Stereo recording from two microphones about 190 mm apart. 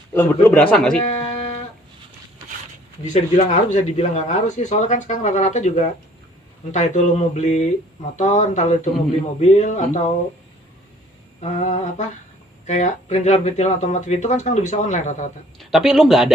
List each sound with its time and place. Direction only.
0.1 s speech: 15° left (ahead or behind)
1.0 s a sound: 35° left (ahead or behind)
3.0 s speech: 40° left (ahead or behind)
11.3 s speech: 40° left (ahead or behind)
15.5 s speech: centre (ahead or behind)